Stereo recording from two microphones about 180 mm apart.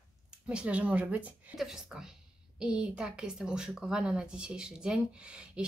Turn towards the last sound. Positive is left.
turn(degrees=-5)  # may be behind; listen again after turning